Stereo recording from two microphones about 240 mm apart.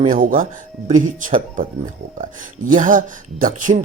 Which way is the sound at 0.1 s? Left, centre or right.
Right.